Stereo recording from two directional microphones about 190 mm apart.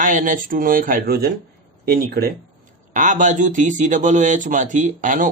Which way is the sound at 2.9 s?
40° right (ahead or behind).